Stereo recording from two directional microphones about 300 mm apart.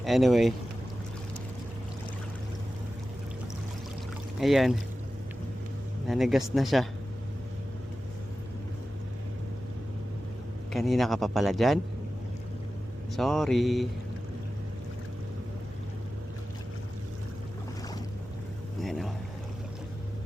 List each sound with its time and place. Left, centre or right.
0.0 s a man's voice: centre
4.4 s speech: centre
6.1 s a man's voice: centre
10.7 s a man's voice: centre
13.1 s a man's voice: centre
18.8 s boat: centre